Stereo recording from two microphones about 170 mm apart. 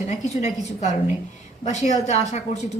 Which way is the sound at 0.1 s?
40° left (ahead or behind).